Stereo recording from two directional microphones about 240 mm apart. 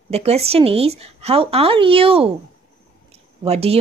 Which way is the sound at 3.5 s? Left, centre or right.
Right.